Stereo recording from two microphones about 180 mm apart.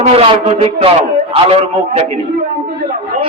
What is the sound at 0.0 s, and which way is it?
A man's voice, 35° right (ahead or behind).